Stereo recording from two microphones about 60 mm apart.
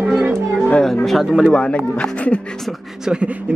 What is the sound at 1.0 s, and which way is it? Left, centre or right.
Speech, centre.